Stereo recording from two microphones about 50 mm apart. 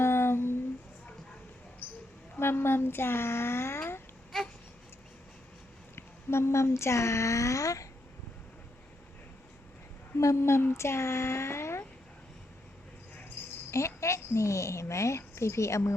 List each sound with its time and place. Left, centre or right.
0.0 s humming: left
1.8 s a sound: left
2.4 s speech: left
3.8 s babbling: left
6.0 s speech: left
10.2 s speech: left
13.7 s a woman's voice: left